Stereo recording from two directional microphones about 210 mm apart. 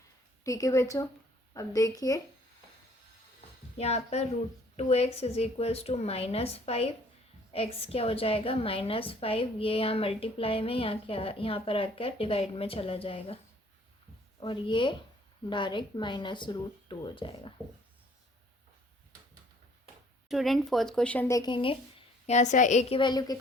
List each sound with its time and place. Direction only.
0.4 s a woman's voice: 15° left (ahead or behind)
3.8 s a woman's voice: 30° left (ahead or behind)
14.4 s a woman's voice: 25° left (ahead or behind)
20.2 s a woman's voice: centre (ahead or behind); by 23.4 s 20° left (ahead or behind)